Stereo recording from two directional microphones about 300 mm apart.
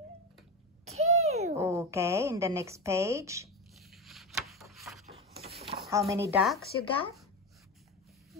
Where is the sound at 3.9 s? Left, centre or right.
Centre.